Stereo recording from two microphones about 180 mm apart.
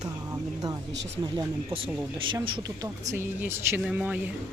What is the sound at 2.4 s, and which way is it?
Speech, 25° right (ahead or behind).